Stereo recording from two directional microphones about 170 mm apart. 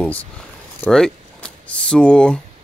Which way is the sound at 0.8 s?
5° left (ahead or behind).